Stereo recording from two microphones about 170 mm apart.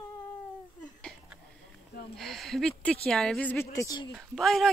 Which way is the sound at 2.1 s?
Centre (ahead or behind).